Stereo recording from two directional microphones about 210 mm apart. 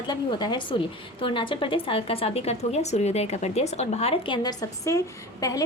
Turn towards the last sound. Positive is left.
turn(degrees=15)  # may be behind; listen again after turning